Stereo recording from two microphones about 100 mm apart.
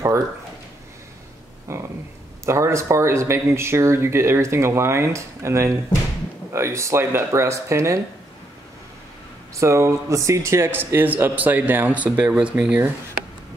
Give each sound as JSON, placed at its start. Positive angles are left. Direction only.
{"t": 1.7, "sound": "a sound", "side_deg": -30}
{"t": 2.4, "sound": "speech", "side_deg": -30}
{"t": 9.6, "sound": "speech", "side_deg": -30}